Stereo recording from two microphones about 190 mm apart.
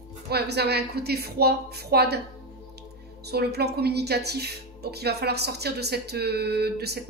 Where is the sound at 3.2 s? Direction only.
60° right (ahead or behind).